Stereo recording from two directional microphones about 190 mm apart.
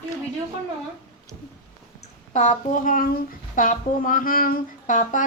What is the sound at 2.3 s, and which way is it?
Speech, 40° left (ahead or behind).